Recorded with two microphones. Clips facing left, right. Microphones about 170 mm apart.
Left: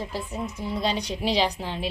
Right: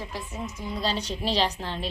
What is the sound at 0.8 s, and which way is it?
Speech, 15° left (ahead or behind).